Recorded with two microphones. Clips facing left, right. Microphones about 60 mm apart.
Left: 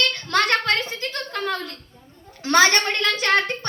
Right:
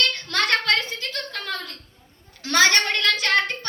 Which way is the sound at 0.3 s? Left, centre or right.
Left.